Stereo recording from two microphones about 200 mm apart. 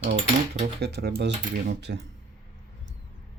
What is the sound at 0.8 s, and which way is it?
Speech, 55° right (ahead or behind).